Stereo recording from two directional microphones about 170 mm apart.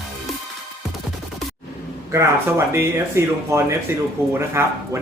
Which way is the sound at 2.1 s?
15° right (ahead or behind).